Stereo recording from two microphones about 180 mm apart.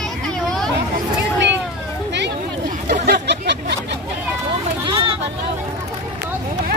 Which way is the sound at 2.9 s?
70° right (ahead or behind).